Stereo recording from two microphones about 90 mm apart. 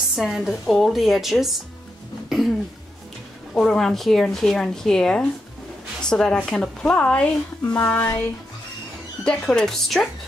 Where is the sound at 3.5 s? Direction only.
5° left (ahead or behind).